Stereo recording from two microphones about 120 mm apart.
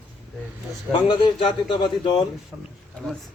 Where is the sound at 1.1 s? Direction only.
40° left (ahead or behind).